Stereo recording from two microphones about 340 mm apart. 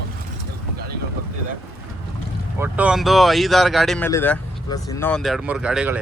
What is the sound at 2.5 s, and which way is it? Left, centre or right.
Speech, centre.